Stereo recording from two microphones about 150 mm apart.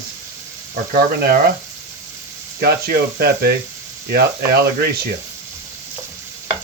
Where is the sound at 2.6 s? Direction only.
90° right.